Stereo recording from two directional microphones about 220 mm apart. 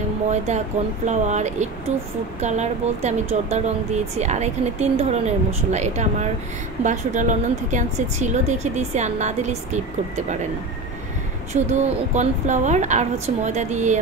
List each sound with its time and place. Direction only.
0.5 s speech: 30° right (ahead or behind)
11.5 s speech: 30° right (ahead or behind)